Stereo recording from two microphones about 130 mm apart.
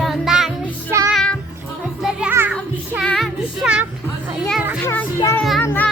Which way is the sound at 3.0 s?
Centre (ahead or behind).